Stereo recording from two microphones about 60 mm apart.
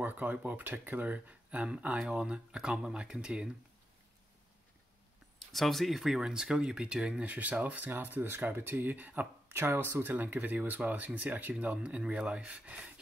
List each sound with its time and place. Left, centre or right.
0.0 s speech: right
5.4 s speech: centre
7.2 s speech: right
9.5 s speech: right
12.7 s a sound: centre